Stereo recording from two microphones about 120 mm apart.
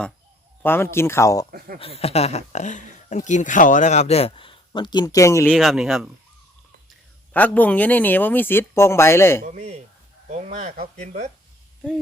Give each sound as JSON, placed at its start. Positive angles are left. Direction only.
{"t": 0.6, "sound": "speech", "side_deg": 20}
{"t": 2.0, "sound": "speech", "side_deg": 60}
{"t": 5.5, "sound": "speech", "side_deg": 0}
{"t": 7.3, "sound": "speech", "side_deg": 15}
{"t": 9.5, "sound": "a man's voice", "side_deg": -70}
{"t": 10.9, "sound": "a man's voice", "side_deg": -70}